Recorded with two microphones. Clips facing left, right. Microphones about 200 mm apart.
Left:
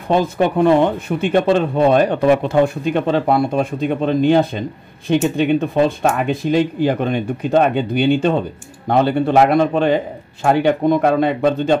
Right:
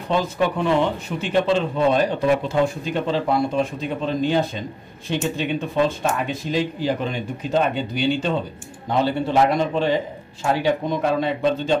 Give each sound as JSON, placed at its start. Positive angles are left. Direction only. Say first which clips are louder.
{"t": 0.1, "sound": "speech", "louder": "left 5 dB", "side_deg": 50}